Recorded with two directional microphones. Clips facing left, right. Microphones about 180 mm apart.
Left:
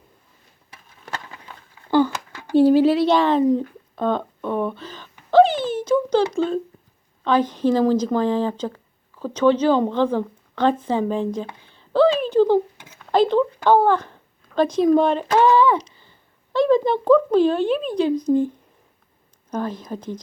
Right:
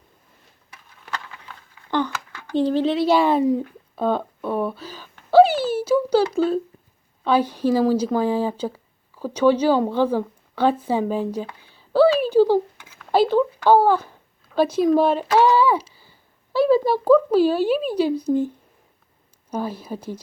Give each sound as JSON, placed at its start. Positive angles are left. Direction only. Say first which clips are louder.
{"t": 1.0, "sound": "patter", "louder": "even", "side_deg": 40}
{"t": 2.3, "sound": "speech", "louder": "left 6 dB", "side_deg": 10}
{"t": 3.5, "sound": "a sound", "louder": "left 2 dB", "side_deg": -5}
{"t": 6.3, "sound": "speech", "louder": "right 1 dB", "side_deg": -5}
{"t": 11.7, "sound": "a sound", "louder": "right 1 dB", "side_deg": -5}
{"t": 13.1, "sound": "speech", "louder": "even", "side_deg": -5}